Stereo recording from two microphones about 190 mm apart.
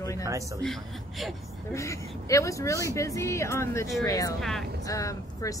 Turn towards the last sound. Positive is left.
turn(degrees=15)  # may be behind; listen again after turning